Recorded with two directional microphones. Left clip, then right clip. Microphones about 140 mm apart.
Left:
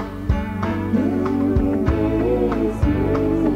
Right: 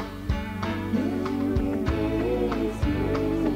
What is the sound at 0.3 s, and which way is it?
Music, 30° right (ahead or behind).